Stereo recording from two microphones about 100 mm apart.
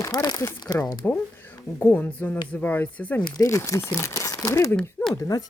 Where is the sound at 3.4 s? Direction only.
30° left (ahead or behind).